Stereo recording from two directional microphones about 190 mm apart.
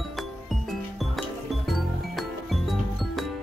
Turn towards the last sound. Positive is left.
turn(degrees=0)  # may be behind; listen again after turning